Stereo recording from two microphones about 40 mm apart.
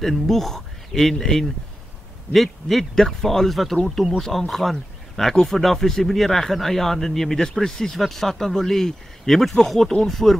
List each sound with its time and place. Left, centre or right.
0.0 s speech: centre
2.3 s speech: centre